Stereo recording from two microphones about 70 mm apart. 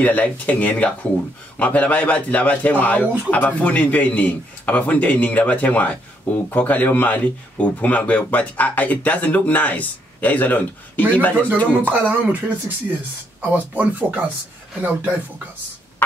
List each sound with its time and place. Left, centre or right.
0.0 s speech: left
11.7 s speech: right